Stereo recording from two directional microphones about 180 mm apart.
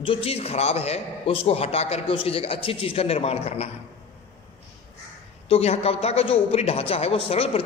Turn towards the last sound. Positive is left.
turn(degrees=35)  # may be behind; listen again after turning